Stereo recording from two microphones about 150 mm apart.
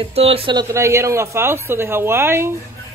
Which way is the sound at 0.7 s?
20° right (ahead or behind).